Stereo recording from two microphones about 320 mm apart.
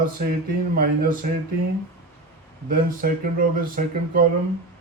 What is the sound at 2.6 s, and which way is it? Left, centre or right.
Speech, right.